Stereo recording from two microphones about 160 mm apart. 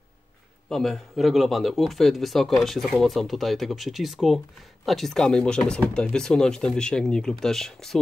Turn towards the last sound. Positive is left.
turn(degrees=0)  # may be behind; listen again after turning